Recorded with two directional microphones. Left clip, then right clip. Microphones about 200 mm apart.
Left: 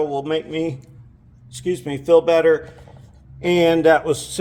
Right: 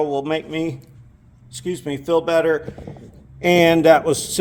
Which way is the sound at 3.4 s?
40° right (ahead or behind).